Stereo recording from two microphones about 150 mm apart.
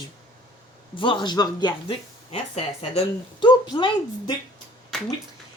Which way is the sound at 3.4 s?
30° left (ahead or behind).